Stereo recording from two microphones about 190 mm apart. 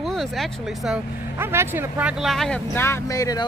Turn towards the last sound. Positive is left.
turn(degrees=20)  # may be behind; listen again after turning